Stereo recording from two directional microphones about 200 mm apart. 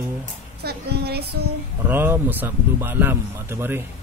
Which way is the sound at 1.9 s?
10° right (ahead or behind).